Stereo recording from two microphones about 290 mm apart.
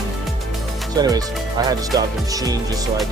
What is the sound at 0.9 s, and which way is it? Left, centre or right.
Speech, centre.